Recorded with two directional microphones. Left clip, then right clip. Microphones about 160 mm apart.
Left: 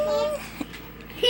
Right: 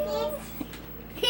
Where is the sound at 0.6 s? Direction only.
10° left (ahead or behind).